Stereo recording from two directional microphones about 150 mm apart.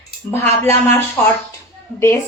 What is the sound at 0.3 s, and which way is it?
Speech, 15° left (ahead or behind).